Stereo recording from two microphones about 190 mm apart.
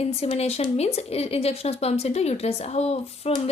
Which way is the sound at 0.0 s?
30° left (ahead or behind).